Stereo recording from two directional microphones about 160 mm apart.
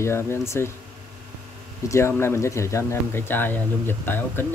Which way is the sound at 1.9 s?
15° left (ahead or behind).